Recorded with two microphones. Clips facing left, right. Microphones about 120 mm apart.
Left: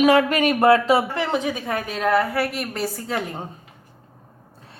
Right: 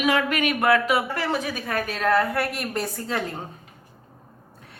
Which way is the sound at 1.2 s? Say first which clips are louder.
Left 3 dB; 20° left (ahead or behind).